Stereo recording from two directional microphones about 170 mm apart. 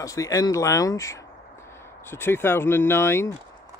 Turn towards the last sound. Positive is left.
turn(degrees=15)  # may be behind; listen again after turning